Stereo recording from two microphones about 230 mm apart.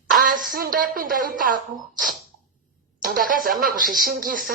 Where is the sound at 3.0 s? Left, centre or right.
Right.